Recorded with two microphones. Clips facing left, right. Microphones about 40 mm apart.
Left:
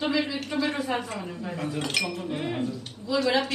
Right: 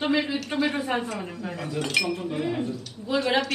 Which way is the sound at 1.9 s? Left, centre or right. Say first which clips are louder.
Right 3 dB; right.